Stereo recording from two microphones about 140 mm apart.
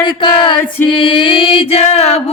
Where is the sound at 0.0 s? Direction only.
35° left (ahead or behind).